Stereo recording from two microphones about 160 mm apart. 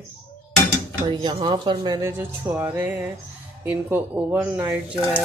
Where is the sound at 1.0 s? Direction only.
30° right (ahead or behind); by 4.7 s 10° right (ahead or behind).